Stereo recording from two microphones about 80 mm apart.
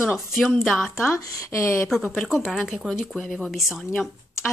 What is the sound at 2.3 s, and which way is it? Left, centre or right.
Speech, centre.